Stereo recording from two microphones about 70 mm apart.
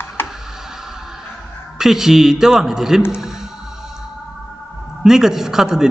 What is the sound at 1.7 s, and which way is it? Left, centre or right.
A man's voice, centre.